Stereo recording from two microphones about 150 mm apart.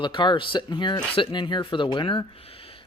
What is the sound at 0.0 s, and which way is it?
Speech, 30° left (ahead or behind).